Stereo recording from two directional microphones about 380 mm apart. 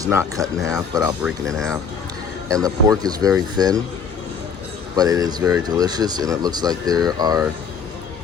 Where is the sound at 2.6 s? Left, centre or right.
Centre.